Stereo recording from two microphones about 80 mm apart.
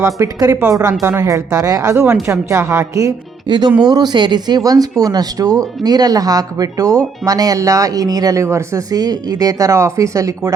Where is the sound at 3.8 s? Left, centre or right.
Right.